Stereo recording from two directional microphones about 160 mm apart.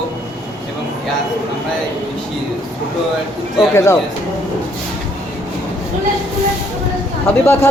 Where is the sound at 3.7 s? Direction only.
15° left (ahead or behind).